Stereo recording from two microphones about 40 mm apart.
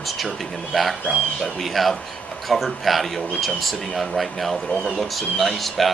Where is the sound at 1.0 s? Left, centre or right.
Centre.